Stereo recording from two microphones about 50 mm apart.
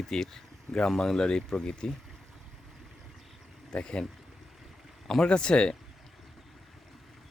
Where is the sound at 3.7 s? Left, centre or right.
Centre.